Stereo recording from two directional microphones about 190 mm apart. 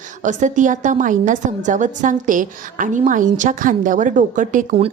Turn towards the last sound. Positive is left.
turn(degrees=-45)  # may be behind; listen again after turning